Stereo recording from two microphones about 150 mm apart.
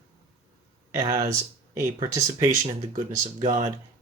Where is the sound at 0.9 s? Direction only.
25° right (ahead or behind).